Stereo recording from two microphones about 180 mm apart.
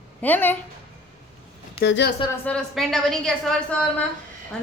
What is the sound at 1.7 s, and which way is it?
Speech, 70° left (ahead or behind).